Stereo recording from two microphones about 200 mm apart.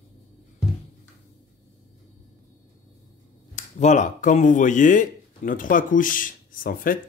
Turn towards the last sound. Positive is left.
turn(degrees=45)  # may be behind; listen again after turning